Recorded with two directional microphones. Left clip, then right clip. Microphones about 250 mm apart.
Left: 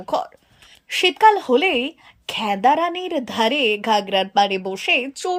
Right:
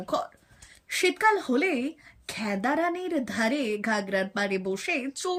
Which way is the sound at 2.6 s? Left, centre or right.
Centre.